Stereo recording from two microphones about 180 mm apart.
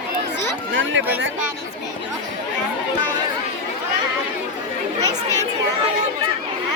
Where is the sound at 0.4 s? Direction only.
90° right.